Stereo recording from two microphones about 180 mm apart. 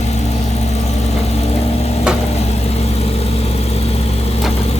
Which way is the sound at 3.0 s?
35° left (ahead or behind).